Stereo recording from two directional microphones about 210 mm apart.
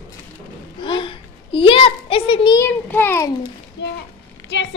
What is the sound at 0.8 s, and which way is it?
A child's voice, 25° left (ahead or behind).